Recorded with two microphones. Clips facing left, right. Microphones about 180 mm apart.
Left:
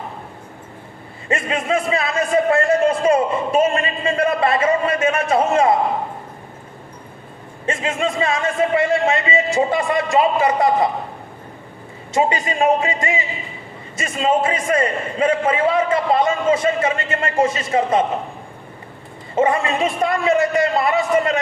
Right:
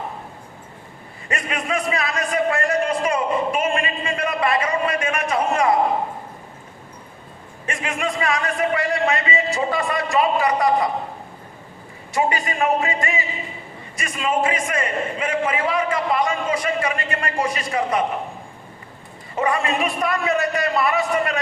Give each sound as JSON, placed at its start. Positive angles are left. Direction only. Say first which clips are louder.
{"t": 1.3, "sound": "a man's voice", "louder": "left 5 dB", "side_deg": 25}
{"t": 7.7, "sound": "a man's voice", "louder": "left 4 dB", "side_deg": 30}
{"t": 12.1, "sound": "a man's voice", "louder": "left 3 dB", "side_deg": 20}
{"t": 19.4, "sound": "a man's voice", "louder": "left 4 dB", "side_deg": 20}